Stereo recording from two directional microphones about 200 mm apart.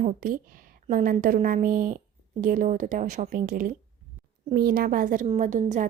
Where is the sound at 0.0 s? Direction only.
45° right (ahead or behind).